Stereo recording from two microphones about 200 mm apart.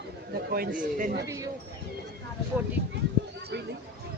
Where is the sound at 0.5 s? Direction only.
45° right (ahead or behind).